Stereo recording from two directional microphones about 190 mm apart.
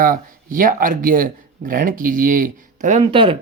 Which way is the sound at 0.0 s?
45° right (ahead or behind).